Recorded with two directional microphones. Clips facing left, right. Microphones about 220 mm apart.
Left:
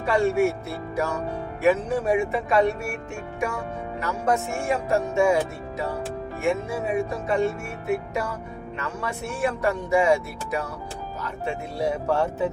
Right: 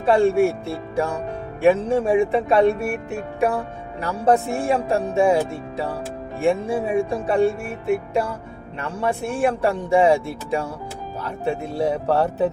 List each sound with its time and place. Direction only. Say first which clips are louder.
0.0 s speech: right 4 dB; 30° right (ahead or behind)